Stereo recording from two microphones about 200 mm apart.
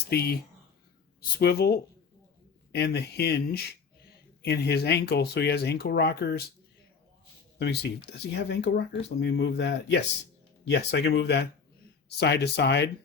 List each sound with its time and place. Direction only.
0.1 s speech: 50° left (ahead or behind)
7.6 s speech: 55° left (ahead or behind)